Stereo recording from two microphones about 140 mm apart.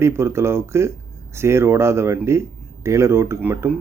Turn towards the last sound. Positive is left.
turn(degrees=-15)  # may be behind; listen again after turning